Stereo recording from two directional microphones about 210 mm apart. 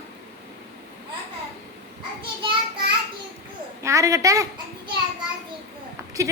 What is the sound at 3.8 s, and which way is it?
A child's voice, 15° right (ahead or behind).